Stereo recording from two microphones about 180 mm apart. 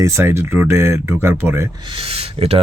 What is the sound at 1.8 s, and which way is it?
Speech, 30° right (ahead or behind).